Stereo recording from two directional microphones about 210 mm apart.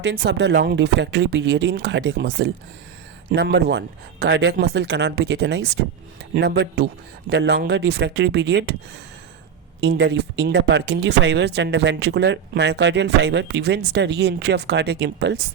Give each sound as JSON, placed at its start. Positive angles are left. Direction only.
{"t": 0.0, "sound": "speech", "side_deg": -55}
{"t": 9.8, "sound": "speech", "side_deg": -55}